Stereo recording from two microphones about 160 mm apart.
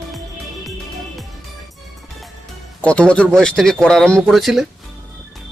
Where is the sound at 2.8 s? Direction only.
5° left (ahead or behind).